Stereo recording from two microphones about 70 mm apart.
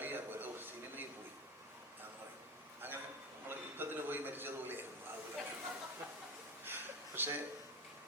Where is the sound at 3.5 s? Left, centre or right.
Right.